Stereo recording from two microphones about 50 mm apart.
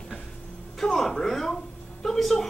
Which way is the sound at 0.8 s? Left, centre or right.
Centre.